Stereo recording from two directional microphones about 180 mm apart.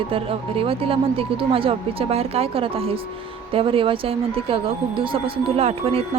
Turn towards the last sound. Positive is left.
turn(degrees=-35)  # may be behind; listen again after turning